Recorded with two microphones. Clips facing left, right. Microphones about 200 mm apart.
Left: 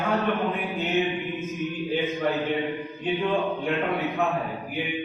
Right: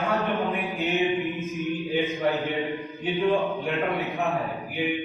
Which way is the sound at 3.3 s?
15° right (ahead or behind).